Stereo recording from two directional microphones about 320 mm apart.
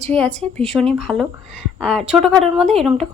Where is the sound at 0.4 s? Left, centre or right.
Centre.